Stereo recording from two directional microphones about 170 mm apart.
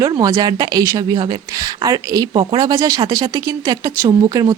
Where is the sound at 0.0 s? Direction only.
20° right (ahead or behind).